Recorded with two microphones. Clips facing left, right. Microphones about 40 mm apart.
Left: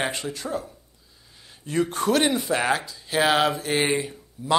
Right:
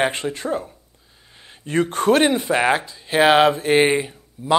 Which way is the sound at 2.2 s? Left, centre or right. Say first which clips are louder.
Right 5 dB; right.